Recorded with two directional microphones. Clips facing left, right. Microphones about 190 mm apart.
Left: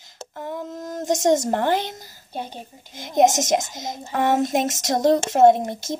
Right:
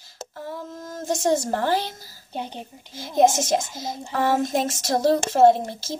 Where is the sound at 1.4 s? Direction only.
20° left (ahead or behind).